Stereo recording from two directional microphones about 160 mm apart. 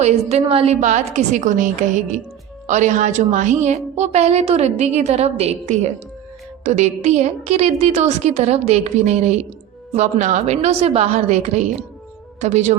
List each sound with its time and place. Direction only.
0.0 s a woman's voice: 40° right (ahead or behind)